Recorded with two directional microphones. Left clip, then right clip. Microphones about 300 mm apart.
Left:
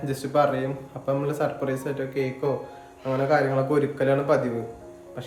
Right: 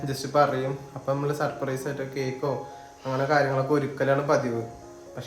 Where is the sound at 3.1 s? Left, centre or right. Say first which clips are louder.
Left 1 dB; centre.